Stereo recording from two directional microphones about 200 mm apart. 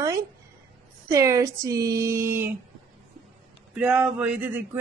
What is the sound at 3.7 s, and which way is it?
Speech, 5° right (ahead or behind).